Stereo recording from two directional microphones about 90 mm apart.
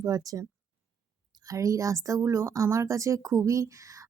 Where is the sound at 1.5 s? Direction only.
40° right (ahead or behind).